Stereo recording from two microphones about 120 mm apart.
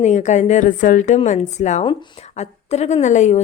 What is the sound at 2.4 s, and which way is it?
A woman's voice, 65° left (ahead or behind).